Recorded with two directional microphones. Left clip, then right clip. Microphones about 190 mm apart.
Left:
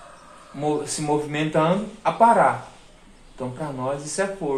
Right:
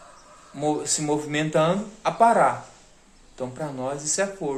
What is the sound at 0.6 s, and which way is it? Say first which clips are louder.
Speech: even; 50° right (ahead or behind).